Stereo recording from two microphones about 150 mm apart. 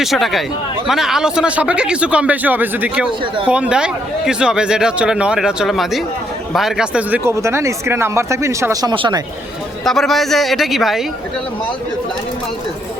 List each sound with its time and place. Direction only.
0.0 s speech: centre (ahead or behind)
7.3 s speech: 20° right (ahead or behind)
9.8 s speech: centre (ahead or behind)